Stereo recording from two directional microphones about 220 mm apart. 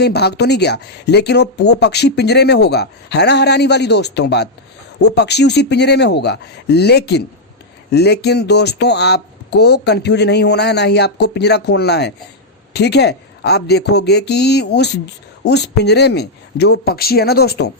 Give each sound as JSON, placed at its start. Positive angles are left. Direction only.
{"t": 0.0, "sound": "speech", "side_deg": 50}